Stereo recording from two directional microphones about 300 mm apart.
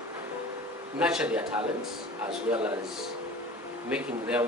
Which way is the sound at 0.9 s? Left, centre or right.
Centre.